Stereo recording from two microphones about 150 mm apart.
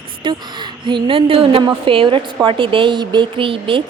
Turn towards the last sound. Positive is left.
turn(degrees=-35)  # may be behind; listen again after turning